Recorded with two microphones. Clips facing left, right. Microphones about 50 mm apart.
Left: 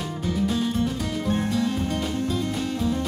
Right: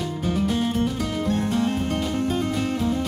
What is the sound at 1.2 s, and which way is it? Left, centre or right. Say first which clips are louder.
Music: right 1 dB; right.